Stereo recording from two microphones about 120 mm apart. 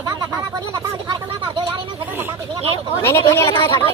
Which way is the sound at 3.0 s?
25° left (ahead or behind).